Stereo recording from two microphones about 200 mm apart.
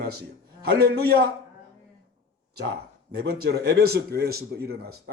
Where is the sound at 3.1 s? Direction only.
50° right (ahead or behind).